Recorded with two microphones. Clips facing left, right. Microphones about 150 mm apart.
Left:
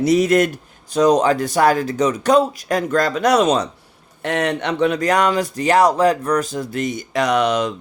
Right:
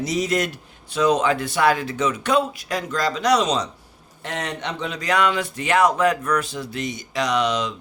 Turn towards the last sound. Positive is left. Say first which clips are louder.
# left 4 dB
turn(degrees=55)  # may be behind; listen again after turning